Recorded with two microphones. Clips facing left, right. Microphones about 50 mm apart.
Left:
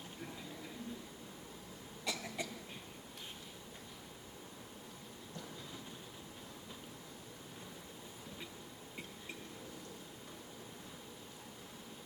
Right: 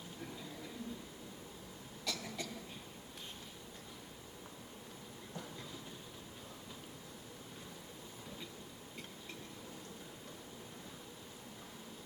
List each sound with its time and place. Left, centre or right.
2.0 s cough: centre